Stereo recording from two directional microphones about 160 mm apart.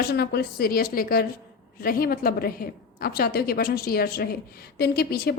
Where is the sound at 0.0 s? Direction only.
85° left.